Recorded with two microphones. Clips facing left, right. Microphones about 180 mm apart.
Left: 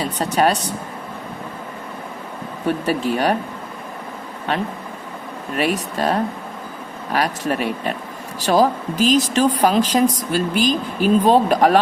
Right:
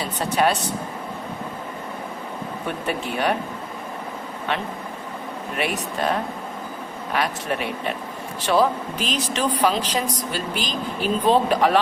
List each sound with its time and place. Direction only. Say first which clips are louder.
0.2 s speech: left 2 dB; 40° left (ahead or behind)
2.6 s speech: left 8 dB; 40° left (ahead or behind)
5.5 s speech: left 5 dB; 40° left (ahead or behind)